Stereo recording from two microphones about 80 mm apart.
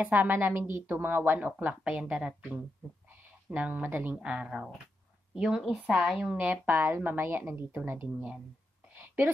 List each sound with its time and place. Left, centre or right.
0.0 s a woman's voice: right
6.3 s a woman's voice: right
8.9 s a sound: right